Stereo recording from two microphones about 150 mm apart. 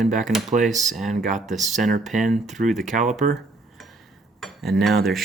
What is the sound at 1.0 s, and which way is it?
Speech, 55° right (ahead or behind).